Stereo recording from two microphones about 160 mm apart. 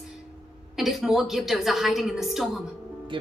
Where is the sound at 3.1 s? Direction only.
30° right (ahead or behind).